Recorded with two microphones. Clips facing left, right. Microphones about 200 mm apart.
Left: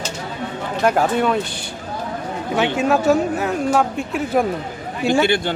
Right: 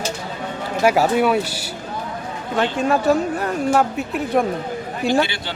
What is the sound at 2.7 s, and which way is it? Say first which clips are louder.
Speech: left 1 dB; 5° left (ahead or behind).